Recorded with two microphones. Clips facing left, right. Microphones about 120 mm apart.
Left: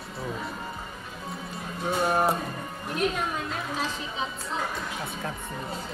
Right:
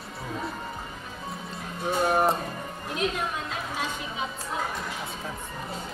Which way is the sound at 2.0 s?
5° right (ahead or behind).